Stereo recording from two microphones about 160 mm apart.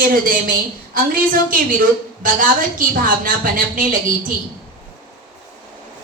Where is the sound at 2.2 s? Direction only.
55° right (ahead or behind).